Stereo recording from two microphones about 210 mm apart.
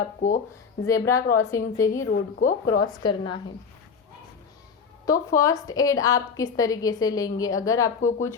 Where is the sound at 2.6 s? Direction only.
90° left.